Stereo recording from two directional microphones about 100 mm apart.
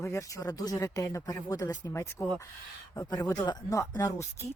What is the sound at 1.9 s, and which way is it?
Speech, 30° left (ahead or behind).